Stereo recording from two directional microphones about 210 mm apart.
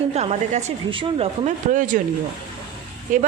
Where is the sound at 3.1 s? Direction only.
35° right (ahead or behind).